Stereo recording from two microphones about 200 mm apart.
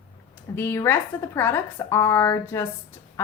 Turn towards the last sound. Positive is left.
turn(degrees=10)  # may be behind; listen again after turning